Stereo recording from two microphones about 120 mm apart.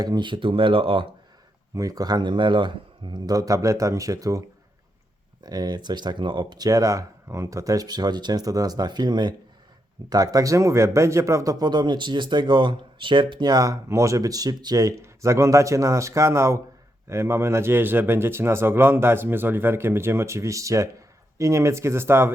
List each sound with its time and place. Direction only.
0.0 s speech: 35° right (ahead or behind)
1.7 s speech: 30° right (ahead or behind)